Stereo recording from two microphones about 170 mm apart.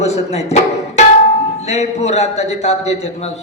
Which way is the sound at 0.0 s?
40° left (ahead or behind).